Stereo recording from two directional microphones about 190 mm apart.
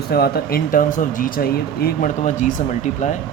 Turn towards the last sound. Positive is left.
turn(degrees=40)  # may be behind; listen again after turning